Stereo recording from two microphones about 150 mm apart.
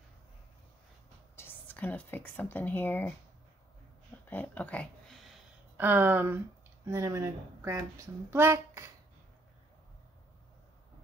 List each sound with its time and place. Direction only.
1.3 s speech: 15° left (ahead or behind)
4.3 s a sound: 10° left (ahead or behind)
5.8 s a woman's voice: 15° right (ahead or behind)